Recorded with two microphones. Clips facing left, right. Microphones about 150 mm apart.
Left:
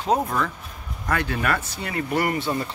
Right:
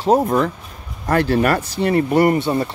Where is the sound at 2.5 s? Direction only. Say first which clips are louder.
Right 6 dB; 25° right (ahead or behind).